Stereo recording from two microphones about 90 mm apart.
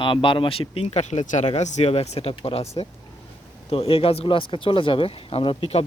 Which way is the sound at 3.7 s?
90° left.